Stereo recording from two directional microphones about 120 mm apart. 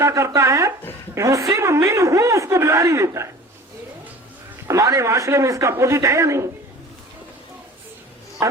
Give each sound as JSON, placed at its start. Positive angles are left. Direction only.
{"t": 0.0, "sound": "a sound", "side_deg": -25}
{"t": 1.1, "sound": "a woman's voice", "side_deg": -25}
{"t": 4.7, "sound": "a woman's voice", "side_deg": -25}